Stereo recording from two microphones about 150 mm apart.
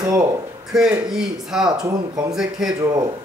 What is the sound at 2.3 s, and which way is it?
Speech, 5° right (ahead or behind).